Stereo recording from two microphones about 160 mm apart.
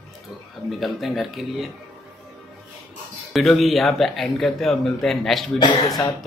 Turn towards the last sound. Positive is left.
turn(degrees=30)  # may be behind; listen again after turning